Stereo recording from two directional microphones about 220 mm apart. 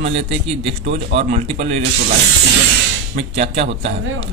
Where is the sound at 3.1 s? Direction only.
30° right (ahead or behind).